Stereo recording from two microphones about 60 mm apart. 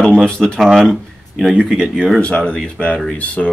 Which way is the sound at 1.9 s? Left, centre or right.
Centre.